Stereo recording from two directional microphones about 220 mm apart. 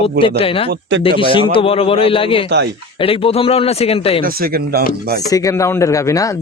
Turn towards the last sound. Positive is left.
turn(degrees=15)  # may be behind; listen again after turning